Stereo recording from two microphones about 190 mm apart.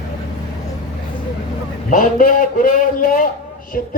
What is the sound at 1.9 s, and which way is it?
Speech, 45° left (ahead or behind).